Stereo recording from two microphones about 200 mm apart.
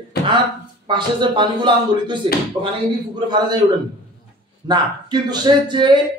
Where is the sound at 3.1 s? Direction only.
20° right (ahead or behind).